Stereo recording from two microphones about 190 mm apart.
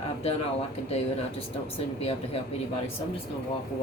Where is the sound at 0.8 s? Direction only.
35° left (ahead or behind).